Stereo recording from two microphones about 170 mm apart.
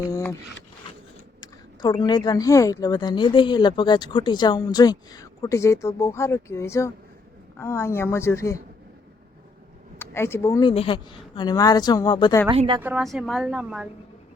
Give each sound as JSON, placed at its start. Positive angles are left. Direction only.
{"t": 0.1, "sound": "speech", "side_deg": 20}
{"t": 1.4, "sound": "a woman's voice", "side_deg": 25}
{"t": 10.0, "sound": "speech", "side_deg": 15}
{"t": 10.7, "sound": "speech", "side_deg": 30}
{"t": 12.5, "sound": "a woman's voice", "side_deg": -30}
{"t": 12.8, "sound": "a woman's voice", "side_deg": -5}